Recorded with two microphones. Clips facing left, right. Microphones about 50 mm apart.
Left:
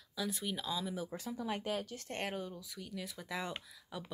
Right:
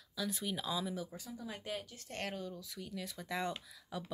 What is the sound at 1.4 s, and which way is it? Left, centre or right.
Speech, left.